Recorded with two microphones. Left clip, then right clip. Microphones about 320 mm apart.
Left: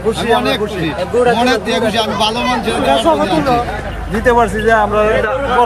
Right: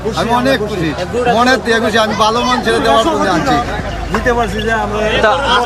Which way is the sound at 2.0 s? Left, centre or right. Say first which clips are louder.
Right 3 dB; centre.